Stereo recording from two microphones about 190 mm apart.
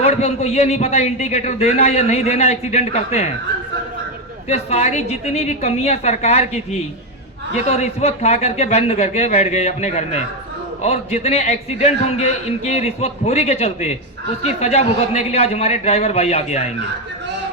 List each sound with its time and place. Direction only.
0.0 s a man's voice: 35° left (ahead or behind)
4.4 s a man's voice: 35° left (ahead or behind)